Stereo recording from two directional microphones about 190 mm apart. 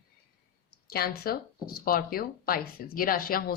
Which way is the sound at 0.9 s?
55° left (ahead or behind).